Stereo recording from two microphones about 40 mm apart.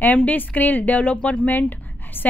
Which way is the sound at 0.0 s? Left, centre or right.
Left.